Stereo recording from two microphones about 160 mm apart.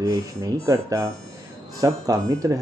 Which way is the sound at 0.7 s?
20° right (ahead or behind).